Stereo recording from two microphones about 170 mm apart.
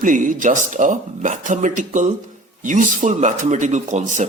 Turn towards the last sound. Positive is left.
turn(degrees=-45)  # may be behind; listen again after turning